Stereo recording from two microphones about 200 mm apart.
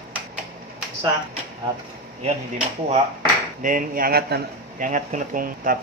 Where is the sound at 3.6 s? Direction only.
40° right (ahead or behind).